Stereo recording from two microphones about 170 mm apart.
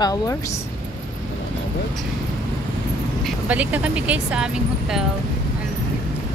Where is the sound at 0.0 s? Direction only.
20° left (ahead or behind).